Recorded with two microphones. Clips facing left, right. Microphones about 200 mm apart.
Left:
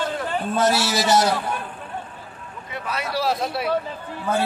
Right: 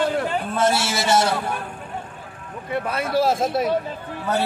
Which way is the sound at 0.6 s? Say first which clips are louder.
Left 1 dB; 25° right (ahead or behind).